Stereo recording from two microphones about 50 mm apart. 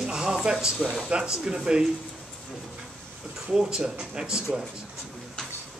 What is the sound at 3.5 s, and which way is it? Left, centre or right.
Speech, centre.